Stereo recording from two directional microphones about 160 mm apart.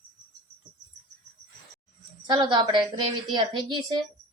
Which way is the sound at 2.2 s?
30° right (ahead or behind).